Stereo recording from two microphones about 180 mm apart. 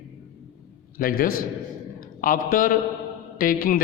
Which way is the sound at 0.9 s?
55° left (ahead or behind).